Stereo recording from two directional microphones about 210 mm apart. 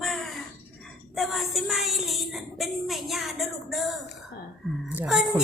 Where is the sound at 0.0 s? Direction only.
Centre (ahead or behind).